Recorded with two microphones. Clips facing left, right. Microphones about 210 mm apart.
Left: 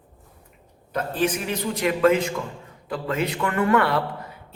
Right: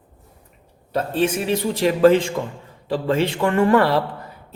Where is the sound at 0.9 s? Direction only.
25° right (ahead or behind).